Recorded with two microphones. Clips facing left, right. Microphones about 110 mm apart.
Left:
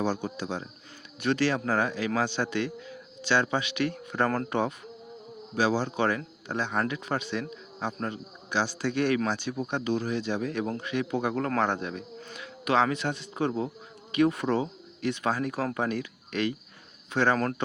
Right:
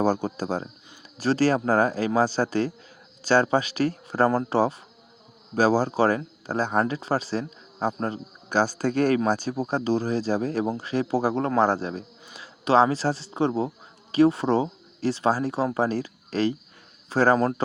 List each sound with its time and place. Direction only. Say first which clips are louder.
0.0 s a man's voice: right 6 dB; 40° right (ahead or behind)